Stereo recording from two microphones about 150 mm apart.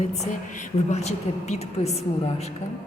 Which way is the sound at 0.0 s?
50° left (ahead or behind).